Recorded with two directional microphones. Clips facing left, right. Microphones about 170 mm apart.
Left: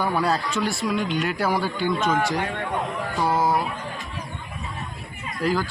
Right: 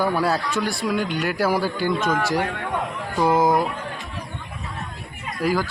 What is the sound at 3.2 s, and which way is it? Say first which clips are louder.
Speech: right 4 dB; 15° right (ahead or behind).